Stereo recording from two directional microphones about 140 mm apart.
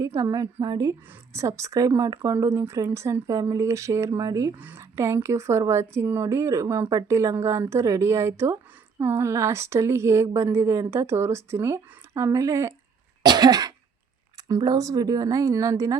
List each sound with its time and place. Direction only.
0.0 s a woman's voice: 25° right (ahead or behind)